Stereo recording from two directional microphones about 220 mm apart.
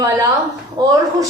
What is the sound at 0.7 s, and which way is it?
Female singing, 15° right (ahead or behind).